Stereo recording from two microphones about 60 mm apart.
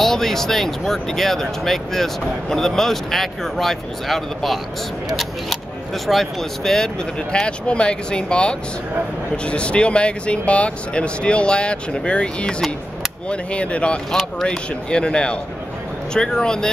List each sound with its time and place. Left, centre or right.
0.0 s speech: centre
7.3 s speech: centre